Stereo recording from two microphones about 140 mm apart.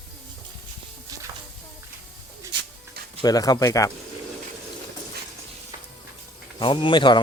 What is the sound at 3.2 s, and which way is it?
Speech, 25° left (ahead or behind).